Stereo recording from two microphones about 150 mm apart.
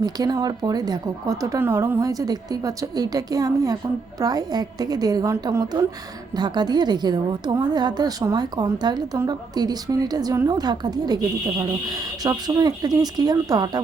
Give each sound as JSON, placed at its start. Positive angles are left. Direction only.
{"t": 0.0, "sound": "a woman's voice", "side_deg": -25}